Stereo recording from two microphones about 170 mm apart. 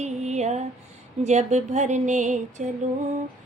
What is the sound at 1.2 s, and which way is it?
Music, 40° right (ahead or behind).